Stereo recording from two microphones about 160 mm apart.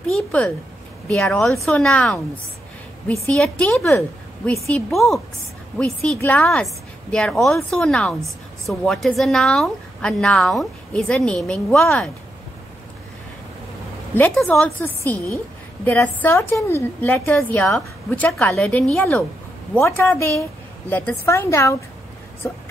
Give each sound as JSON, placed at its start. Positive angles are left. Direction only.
{"t": 0.0, "sound": "a sound", "side_deg": 5}
{"t": 1.0, "sound": "a woman's voice", "side_deg": 5}
{"t": 3.3, "sound": "a woman's voice", "side_deg": 5}
{"t": 14.1, "sound": "a woman's voice", "side_deg": 10}